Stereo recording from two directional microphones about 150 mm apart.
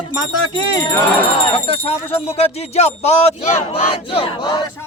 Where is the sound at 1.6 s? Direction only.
40° left (ahead or behind).